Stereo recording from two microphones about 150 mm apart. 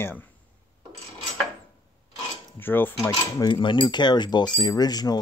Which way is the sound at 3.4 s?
30° left (ahead or behind).